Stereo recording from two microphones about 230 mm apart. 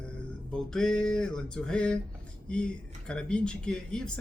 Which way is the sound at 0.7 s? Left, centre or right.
Centre.